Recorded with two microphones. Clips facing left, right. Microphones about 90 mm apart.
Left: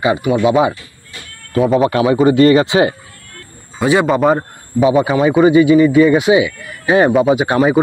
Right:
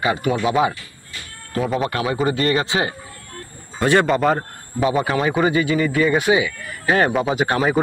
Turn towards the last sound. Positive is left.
turn(degrees=5)  # may be behind; listen again after turning